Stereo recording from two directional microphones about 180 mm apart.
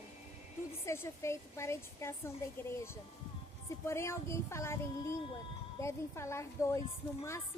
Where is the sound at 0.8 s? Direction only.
15° left (ahead or behind).